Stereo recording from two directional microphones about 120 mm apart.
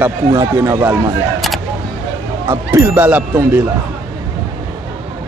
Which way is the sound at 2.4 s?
20° right (ahead or behind).